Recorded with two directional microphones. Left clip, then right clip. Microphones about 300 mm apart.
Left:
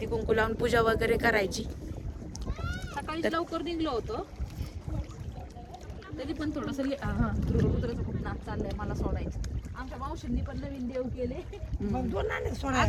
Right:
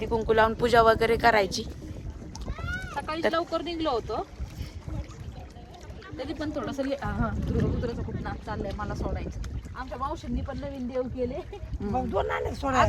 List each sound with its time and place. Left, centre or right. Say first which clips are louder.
0.0 s speech: right 5 dB; centre
2.6 s rowboat: right 6 dB; centre
3.3 s speech: right 3 dB; centre
6.1 s speech: right 2 dB; centre
9.0 s speech: right 1 dB; centre